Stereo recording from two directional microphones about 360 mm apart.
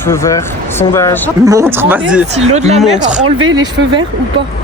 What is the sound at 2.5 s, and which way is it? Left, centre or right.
Speech, centre.